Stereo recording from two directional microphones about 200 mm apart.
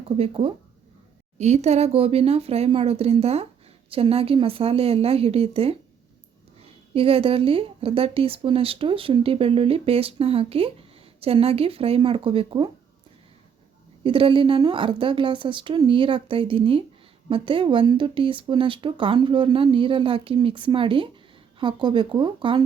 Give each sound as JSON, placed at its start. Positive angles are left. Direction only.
{"t": 0.2, "sound": "a woman's voice", "side_deg": -25}
{"t": 14.0, "sound": "a woman's voice", "side_deg": -25}